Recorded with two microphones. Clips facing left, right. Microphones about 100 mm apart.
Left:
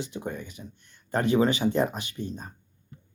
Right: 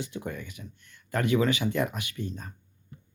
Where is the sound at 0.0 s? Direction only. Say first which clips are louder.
Left 2 dB; 25° left (ahead or behind).